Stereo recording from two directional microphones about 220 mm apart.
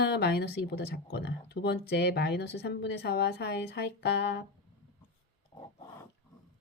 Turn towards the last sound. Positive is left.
turn(degrees=25)  # may be behind; listen again after turning